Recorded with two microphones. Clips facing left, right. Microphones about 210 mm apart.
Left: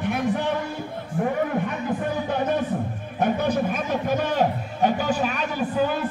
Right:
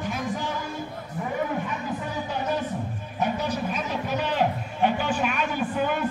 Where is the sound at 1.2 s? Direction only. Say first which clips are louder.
Left 5 dB; 55° left (ahead or behind); by 6.0 s 35° left (ahead or behind).